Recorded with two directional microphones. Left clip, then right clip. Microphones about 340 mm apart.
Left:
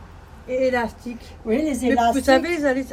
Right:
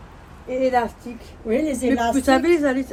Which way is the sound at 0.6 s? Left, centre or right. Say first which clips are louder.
Right 2 dB; centre.